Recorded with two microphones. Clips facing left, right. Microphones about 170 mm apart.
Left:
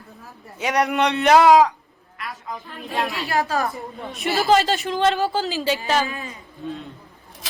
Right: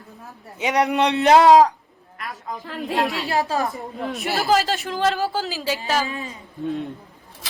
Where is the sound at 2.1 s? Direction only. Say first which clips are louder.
Right 1 dB; 45° right (ahead or behind).